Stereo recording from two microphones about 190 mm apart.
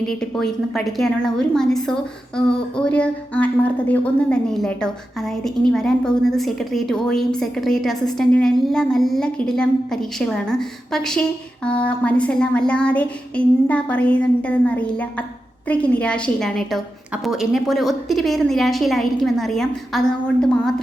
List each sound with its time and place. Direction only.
0.0 s a woman's voice: 5° left (ahead or behind)